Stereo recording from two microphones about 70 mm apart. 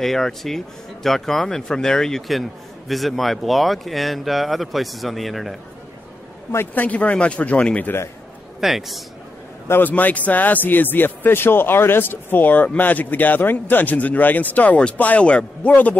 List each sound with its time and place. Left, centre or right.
0.0 s speech: centre
6.7 s a man's voice: left
8.5 s speech: centre
9.7 s a man's voice: left